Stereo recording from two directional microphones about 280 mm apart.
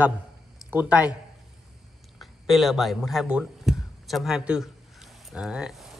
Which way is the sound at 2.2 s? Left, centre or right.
Centre.